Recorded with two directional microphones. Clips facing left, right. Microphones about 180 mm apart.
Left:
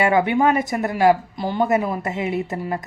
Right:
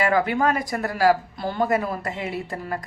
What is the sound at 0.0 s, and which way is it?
A woman's voice, 25° left (ahead or behind).